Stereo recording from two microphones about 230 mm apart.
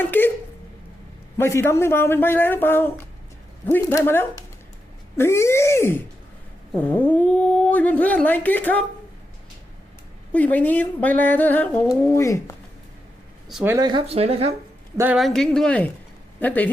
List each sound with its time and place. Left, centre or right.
0.0 s speech: centre
1.4 s speech: centre
10.3 s speech: centre
13.5 s speech: centre
13.7 s speech: centre
14.9 s speech: centre